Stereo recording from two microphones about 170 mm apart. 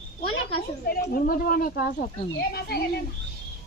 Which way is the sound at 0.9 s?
60° left (ahead or behind).